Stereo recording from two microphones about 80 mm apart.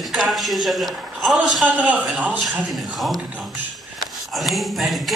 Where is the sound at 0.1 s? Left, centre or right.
Centre.